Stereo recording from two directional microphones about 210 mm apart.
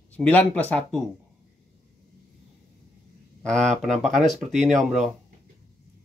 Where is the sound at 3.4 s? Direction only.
5° left (ahead or behind).